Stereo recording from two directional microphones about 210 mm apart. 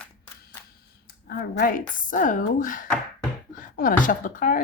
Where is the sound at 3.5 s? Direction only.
40° left (ahead or behind).